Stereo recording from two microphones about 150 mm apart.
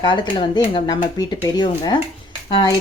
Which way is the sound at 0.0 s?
30° left (ahead or behind).